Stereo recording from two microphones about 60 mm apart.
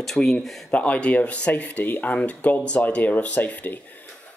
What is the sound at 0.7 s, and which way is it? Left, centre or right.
Speech, left.